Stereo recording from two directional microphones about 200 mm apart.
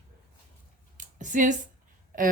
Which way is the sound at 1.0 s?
40° right (ahead or behind).